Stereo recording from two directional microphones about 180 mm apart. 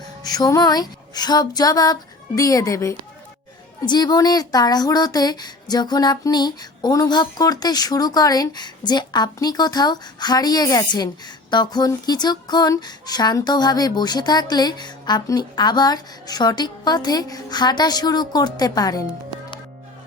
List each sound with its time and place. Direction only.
0.2 s speech: 20° left (ahead or behind)